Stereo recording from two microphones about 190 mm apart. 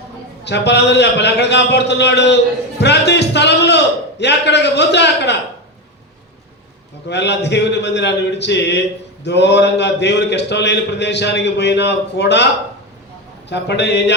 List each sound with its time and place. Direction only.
0.4 s a man's voice: 65° left (ahead or behind)
7.1 s a man's voice: 65° left (ahead or behind)
13.5 s a man's voice: 65° left (ahead or behind)